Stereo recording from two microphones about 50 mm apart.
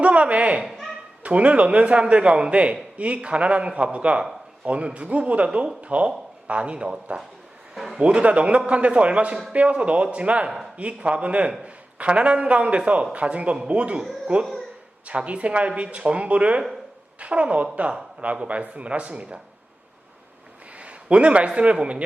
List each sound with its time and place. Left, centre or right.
0.0 s speech: right
0.6 s a sound: centre
1.2 s speech: right
5.5 s speech: centre
5.8 s speech: right
20.7 s a man's voice: right